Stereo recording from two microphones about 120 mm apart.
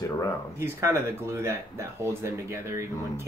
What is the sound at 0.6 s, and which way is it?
Speech, 20° right (ahead or behind).